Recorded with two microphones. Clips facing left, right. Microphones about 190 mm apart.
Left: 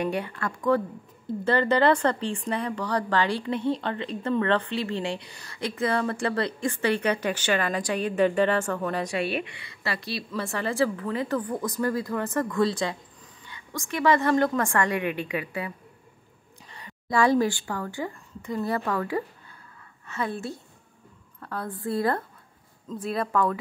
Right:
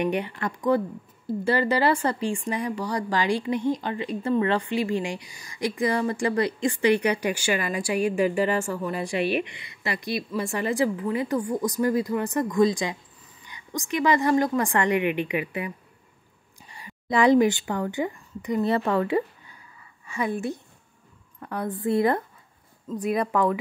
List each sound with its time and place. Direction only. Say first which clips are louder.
0.0 s a woman's voice: right 2 dB; 20° right (ahead or behind)
16.7 s a woman's voice: right 1 dB; 15° right (ahead or behind)
19.8 s a sound: right 2 dB; 15° right (ahead or behind)
21.4 s a woman's voice: right 4 dB; 15° right (ahead or behind)